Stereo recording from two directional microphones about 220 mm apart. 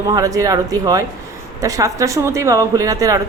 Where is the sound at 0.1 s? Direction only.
15° right (ahead or behind).